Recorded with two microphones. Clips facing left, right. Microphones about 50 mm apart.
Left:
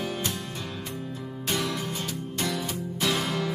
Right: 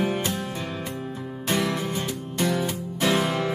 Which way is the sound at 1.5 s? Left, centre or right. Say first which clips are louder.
Right 4 dB; right.